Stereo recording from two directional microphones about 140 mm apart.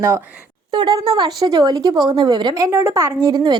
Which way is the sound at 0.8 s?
30° right (ahead or behind).